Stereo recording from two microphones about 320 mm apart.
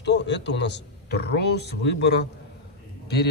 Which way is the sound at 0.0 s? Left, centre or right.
Left.